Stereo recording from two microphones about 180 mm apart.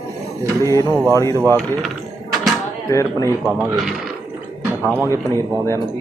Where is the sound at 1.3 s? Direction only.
15° right (ahead or behind).